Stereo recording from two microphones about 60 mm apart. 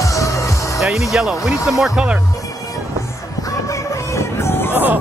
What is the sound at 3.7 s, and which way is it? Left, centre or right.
Music, left.